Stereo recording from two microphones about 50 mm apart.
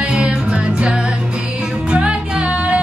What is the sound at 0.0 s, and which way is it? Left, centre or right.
Music, right.